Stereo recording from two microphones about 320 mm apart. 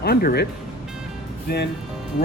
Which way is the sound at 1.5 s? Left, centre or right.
Left.